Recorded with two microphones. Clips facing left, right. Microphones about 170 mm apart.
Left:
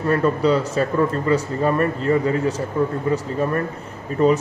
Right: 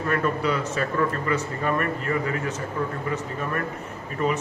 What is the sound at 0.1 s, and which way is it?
Speech, 30° left (ahead or behind).